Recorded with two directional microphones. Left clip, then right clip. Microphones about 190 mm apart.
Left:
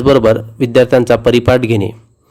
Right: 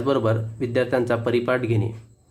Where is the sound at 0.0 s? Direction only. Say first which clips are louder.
Left 13 dB; 40° left (ahead or behind).